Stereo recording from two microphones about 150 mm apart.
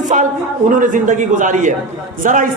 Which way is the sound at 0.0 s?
55° right (ahead or behind).